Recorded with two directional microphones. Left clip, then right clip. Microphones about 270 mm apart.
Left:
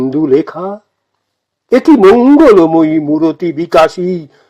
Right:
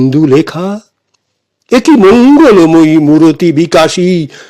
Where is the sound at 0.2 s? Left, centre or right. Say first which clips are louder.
Right 1 dB; right.